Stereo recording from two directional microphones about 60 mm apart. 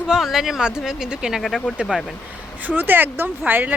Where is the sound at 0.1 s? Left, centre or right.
Centre.